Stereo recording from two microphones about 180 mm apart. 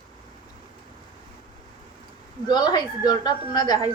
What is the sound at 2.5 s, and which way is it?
A woman's voice, 25° left (ahead or behind).